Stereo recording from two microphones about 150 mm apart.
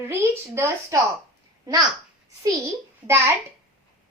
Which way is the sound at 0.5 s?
20° right (ahead or behind).